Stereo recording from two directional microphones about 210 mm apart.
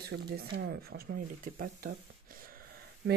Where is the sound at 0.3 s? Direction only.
50° right (ahead or behind).